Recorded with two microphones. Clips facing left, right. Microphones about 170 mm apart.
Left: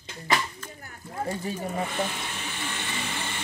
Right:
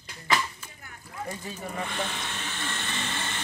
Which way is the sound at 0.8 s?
35° left (ahead or behind).